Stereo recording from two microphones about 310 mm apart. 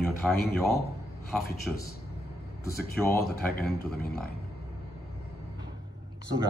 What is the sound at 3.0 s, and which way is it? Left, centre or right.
Speech, centre.